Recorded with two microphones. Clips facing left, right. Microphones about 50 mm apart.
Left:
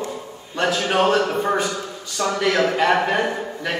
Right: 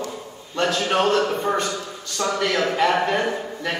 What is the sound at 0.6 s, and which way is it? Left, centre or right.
A man's voice, centre.